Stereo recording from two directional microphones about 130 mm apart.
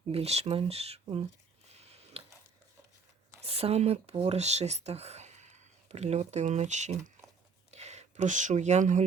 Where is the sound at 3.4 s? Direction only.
50° right (ahead or behind).